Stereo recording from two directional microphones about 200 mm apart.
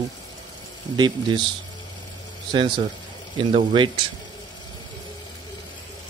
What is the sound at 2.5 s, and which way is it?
Speech, 25° right (ahead or behind).